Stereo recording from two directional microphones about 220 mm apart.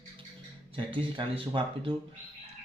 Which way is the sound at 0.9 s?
20° right (ahead or behind).